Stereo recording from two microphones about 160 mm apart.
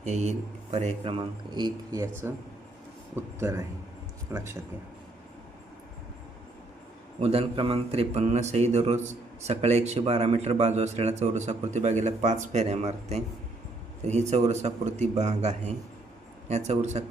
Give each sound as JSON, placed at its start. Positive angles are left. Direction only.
{"t": 0.0, "sound": "a man's voice", "side_deg": -45}
{"t": 7.2, "sound": "a man's voice", "side_deg": -40}